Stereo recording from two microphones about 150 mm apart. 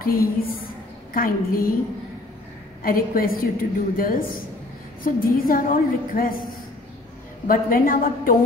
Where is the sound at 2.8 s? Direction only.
75° left (ahead or behind).